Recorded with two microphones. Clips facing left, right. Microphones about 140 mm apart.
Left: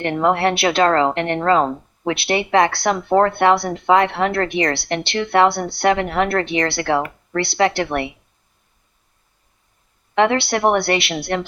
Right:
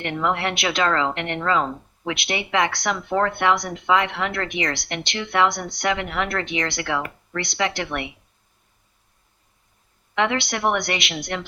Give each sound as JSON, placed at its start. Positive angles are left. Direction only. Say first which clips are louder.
{"t": 0.0, "sound": "a woman's voice", "louder": "left 7 dB", "side_deg": 40}
{"t": 3.7, "sound": "a woman's voice", "louder": "left 6 dB", "side_deg": 40}
{"t": 5.9, "sound": "a woman's voice", "louder": "left 7 dB", "side_deg": 40}
{"t": 10.2, "sound": "a woman's voice", "louder": "left 6 dB", "side_deg": 35}